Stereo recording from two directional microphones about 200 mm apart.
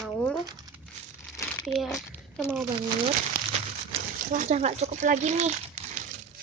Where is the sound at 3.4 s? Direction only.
45° right (ahead or behind).